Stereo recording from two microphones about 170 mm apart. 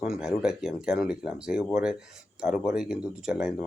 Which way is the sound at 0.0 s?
5° right (ahead or behind).